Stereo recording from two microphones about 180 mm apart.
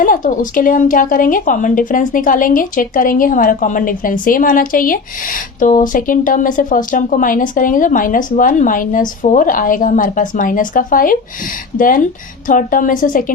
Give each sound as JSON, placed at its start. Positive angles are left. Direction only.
{"t": 0.0, "sound": "a woman's voice", "side_deg": 50}